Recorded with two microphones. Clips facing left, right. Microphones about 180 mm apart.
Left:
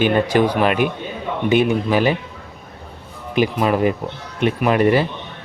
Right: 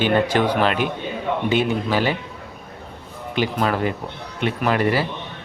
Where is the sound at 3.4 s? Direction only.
15° left (ahead or behind).